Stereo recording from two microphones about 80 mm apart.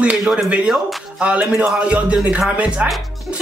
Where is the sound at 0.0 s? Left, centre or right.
Centre.